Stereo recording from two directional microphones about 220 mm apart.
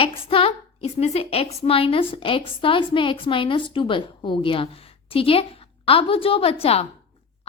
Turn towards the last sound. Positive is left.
turn(degrees=25)  # may be behind; listen again after turning